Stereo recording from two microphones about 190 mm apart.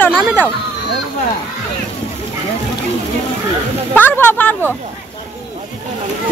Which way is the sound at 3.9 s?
10° left (ahead or behind).